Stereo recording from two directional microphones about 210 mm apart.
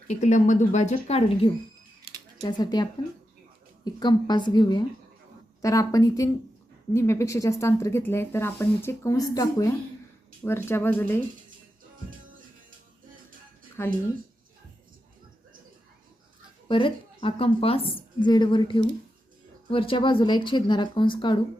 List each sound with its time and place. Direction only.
0.1 s speech: 35° left (ahead or behind)
2.4 s a woman's voice: 20° left (ahead or behind)
13.8 s speech: 10° left (ahead or behind)
16.6 s a woman's voice: 25° left (ahead or behind)